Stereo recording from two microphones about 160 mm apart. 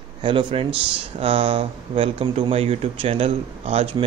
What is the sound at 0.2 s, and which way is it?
Speech, 30° right (ahead or behind).